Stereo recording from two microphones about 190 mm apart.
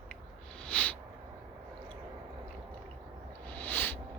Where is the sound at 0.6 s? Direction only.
5° left (ahead or behind).